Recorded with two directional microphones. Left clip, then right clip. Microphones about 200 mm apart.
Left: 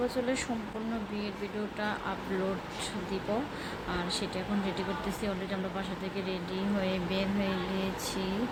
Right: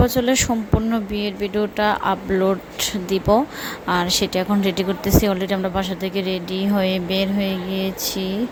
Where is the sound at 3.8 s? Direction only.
40° right (ahead or behind).